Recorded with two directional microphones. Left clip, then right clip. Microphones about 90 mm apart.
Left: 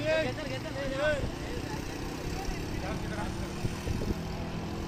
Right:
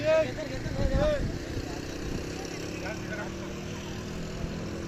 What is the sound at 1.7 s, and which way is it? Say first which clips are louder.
Vehicle: right 1 dB; 5° left (ahead or behind).